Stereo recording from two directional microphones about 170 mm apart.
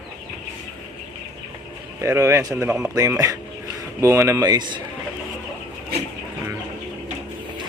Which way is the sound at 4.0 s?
15° right (ahead or behind).